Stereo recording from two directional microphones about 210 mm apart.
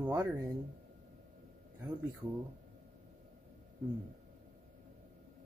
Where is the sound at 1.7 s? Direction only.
20° right (ahead or behind).